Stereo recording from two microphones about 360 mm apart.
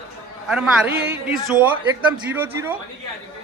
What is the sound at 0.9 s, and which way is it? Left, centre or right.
Speech, right.